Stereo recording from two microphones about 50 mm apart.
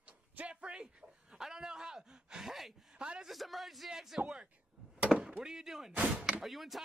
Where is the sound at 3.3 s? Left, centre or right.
Centre.